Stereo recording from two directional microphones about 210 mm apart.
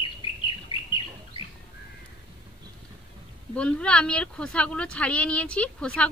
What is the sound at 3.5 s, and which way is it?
A woman's voice, 5° left (ahead or behind).